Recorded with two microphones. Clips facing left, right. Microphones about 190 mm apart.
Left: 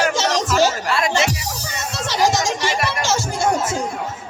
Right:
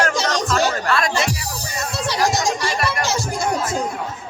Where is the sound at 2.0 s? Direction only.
75° left (ahead or behind).